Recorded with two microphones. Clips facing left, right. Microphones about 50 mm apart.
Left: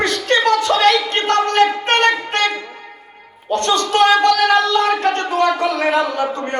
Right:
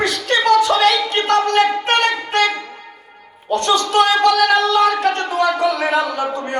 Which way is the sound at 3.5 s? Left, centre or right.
Left.